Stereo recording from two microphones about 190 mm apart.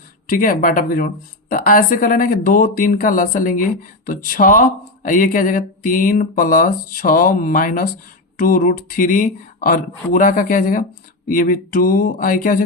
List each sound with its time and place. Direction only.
0.3 s a woman's voice: 45° left (ahead or behind)